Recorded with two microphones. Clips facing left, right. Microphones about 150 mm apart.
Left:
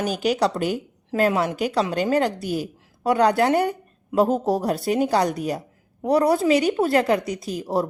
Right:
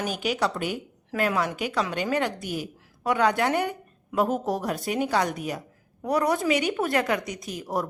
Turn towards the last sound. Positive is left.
turn(degrees=30)  # may be behind; listen again after turning